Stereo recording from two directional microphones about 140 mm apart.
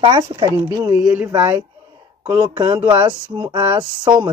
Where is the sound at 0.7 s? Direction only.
30° right (ahead or behind).